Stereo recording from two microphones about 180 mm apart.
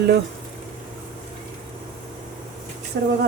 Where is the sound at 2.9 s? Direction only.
65° right (ahead or behind).